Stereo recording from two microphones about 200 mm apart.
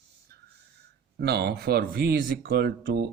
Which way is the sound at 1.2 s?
55° right (ahead or behind).